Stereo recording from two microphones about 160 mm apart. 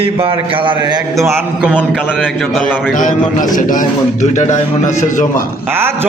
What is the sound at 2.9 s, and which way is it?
A man's voice, 55° left (ahead or behind).